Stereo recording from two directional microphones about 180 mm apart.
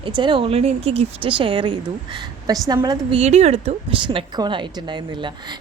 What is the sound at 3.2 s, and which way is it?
A woman's voice, 35° right (ahead or behind).